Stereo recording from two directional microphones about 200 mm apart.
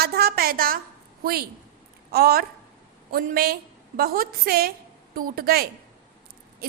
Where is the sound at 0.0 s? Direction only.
50° right (ahead or behind).